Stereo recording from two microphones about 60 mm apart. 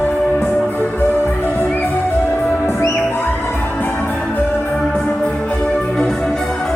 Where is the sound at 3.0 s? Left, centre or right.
Left.